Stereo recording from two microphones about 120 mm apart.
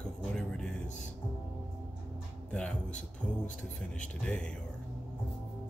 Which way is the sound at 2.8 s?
90° left.